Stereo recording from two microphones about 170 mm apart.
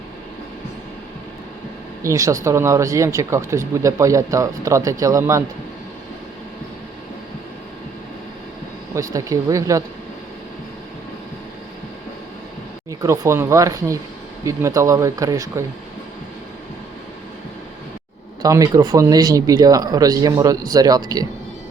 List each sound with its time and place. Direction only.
2.0 s speech: 20° right (ahead or behind)
9.0 s speech: 20° right (ahead or behind)
12.9 s speech: 20° right (ahead or behind)
18.4 s speech: 20° right (ahead or behind)